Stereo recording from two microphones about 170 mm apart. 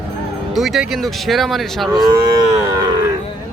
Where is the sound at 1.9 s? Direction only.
25° right (ahead or behind).